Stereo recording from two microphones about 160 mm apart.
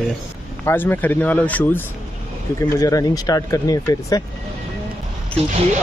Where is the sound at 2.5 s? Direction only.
20° left (ahead or behind).